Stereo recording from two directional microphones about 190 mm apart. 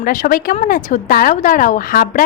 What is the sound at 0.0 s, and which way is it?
A woman's voice, 45° left (ahead or behind).